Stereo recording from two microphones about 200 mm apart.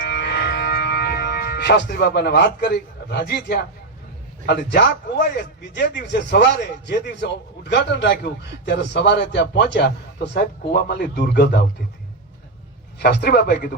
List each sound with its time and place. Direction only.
0.0 s music: 55° left (ahead or behind)
4.4 s a man's voice: 55° left (ahead or behind)
13.0 s a man's voice: 50° left (ahead or behind)